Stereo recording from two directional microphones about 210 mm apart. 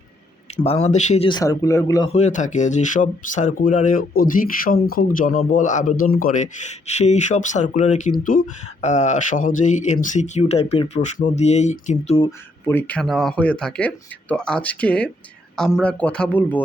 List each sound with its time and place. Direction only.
0.5 s speech: 30° left (ahead or behind)
2.0 s speech: 30° left (ahead or behind)
12.6 s speech: 10° left (ahead or behind)